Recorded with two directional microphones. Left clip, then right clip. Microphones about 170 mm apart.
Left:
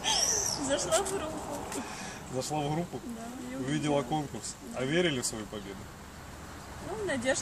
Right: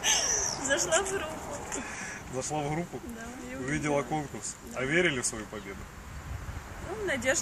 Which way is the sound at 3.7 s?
15° left (ahead or behind).